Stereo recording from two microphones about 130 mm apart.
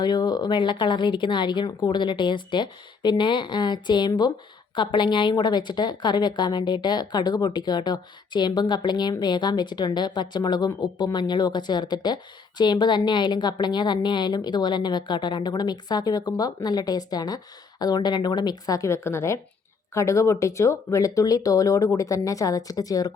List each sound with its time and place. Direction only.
0.0 s speech: 35° left (ahead or behind)